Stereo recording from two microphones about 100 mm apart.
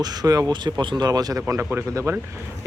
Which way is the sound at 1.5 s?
25° right (ahead or behind).